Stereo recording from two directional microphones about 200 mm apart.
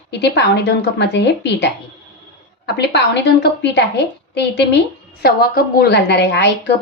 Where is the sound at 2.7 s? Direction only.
55° left (ahead or behind).